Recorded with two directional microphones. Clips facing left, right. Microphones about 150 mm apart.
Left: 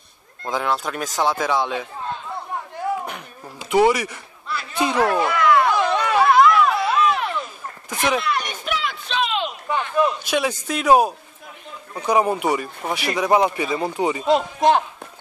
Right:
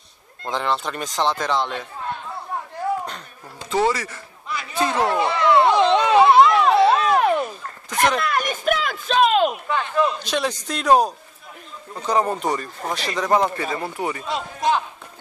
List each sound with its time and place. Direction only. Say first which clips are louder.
0.5 s speech: left 1 dB; 5° left (ahead or behind)
3.1 s insect: left 2 dB; 10° left (ahead or behind)
4.9 s a sound: left 2 dB; 25° right (ahead or behind); by 9.5 s 45° right (ahead or behind)
9.7 s a man's voice: left 1 dB; 15° left (ahead or behind)
14.3 s a man's voice: left 6 dB; 55° left (ahead or behind)